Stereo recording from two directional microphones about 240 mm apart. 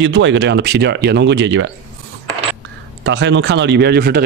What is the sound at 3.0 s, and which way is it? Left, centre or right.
A man's voice, right.